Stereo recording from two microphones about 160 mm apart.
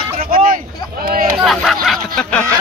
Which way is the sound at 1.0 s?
65° right (ahead or behind).